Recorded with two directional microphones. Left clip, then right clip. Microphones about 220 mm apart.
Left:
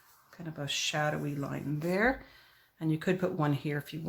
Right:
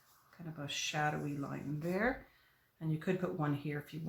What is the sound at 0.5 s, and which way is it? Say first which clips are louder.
Speech: left 6 dB; 40° left (ahead or behind).